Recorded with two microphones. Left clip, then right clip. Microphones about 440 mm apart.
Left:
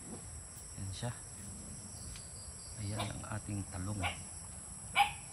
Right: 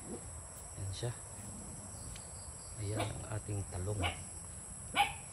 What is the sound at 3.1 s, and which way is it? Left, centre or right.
Speech, centre.